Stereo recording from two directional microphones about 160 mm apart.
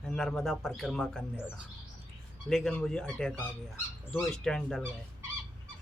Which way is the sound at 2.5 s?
5° left (ahead or behind).